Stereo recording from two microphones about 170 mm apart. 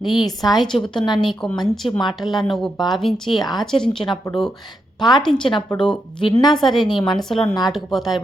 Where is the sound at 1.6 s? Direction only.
Centre (ahead or behind).